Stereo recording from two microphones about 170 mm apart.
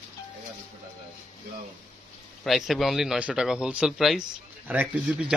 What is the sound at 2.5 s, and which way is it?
A man's voice, centre (ahead or behind).